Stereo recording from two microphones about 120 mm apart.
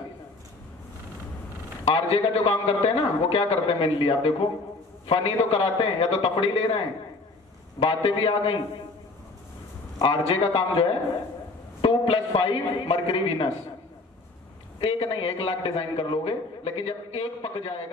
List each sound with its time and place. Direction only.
1.9 s a man's voice: 45° left (ahead or behind)
7.8 s a man's voice: 50° left (ahead or behind)
9.9 s a man's voice: 50° left (ahead or behind)
11.8 s a man's voice: 50° left (ahead or behind)
14.8 s a man's voice: 50° left (ahead or behind)